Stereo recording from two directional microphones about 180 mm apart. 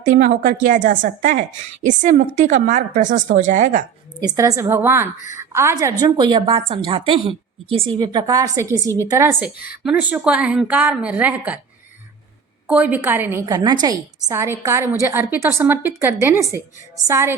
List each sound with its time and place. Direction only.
0.0 s a woman's voice: 45° right (ahead or behind)
4.2 s a woman's voice: 15° right (ahead or behind)
12.6 s a woman's voice: 10° right (ahead or behind)